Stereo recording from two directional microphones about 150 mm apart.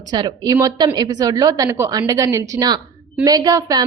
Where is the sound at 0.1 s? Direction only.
30° right (ahead or behind).